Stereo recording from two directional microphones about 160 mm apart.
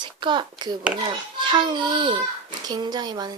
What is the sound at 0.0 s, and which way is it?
A child's voice, 30° right (ahead or behind).